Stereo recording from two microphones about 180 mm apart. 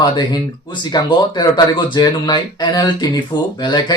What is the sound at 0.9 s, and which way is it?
Speech, 25° left (ahead or behind).